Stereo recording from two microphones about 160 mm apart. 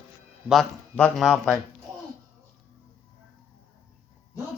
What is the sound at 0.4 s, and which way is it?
Speech, centre (ahead or behind).